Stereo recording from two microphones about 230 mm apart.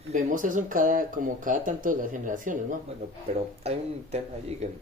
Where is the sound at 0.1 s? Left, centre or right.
Right.